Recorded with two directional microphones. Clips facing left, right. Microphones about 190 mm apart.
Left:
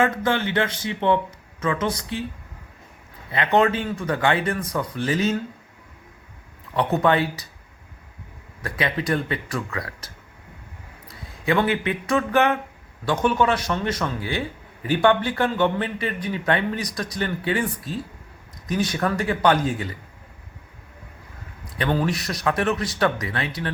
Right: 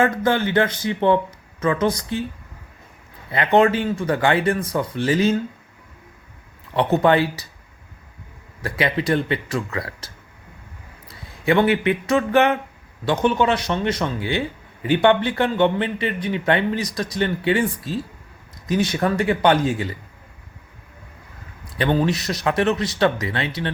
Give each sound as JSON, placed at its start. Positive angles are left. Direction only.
{"t": 0.0, "sound": "speech", "side_deg": -40}
{"t": 3.3, "sound": "a man's voice", "side_deg": -35}
{"t": 6.7, "sound": "speech", "side_deg": -30}
{"t": 8.8, "sound": "a man's voice", "side_deg": -30}
{"t": 12.0, "sound": "a man's voice", "side_deg": -25}
{"t": 18.7, "sound": "a man's voice", "side_deg": -25}
{"t": 21.8, "sound": "a man's voice", "side_deg": -25}